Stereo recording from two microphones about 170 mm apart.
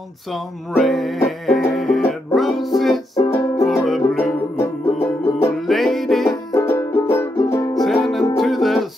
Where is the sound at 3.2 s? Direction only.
15° left (ahead or behind).